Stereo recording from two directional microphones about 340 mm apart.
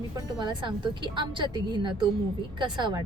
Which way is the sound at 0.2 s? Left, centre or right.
Centre.